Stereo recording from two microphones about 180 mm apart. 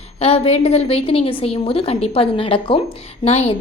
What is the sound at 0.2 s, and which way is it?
A woman's voice, 35° left (ahead or behind).